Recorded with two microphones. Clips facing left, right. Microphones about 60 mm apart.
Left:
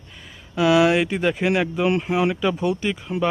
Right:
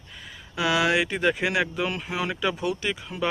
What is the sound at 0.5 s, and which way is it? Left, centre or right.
Speech, centre.